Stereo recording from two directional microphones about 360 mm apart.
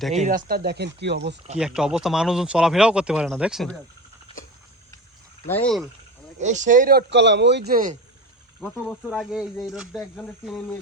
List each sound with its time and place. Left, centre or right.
0.1 s a man's voice: right
1.5 s speech: centre
5.5 s speech: centre
6.4 s a man's voice: centre
8.6 s speech: centre